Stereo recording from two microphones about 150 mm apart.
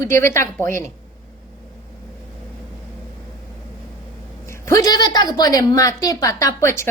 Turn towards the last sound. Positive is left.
turn(degrees=20)  # may be behind; listen again after turning